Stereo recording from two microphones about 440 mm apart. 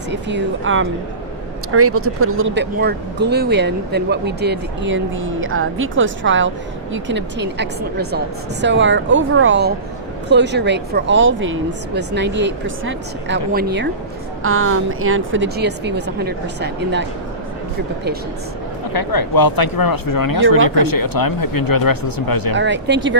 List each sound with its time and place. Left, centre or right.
0.1 s speech: right
18.9 s speech: left
22.5 s speech: right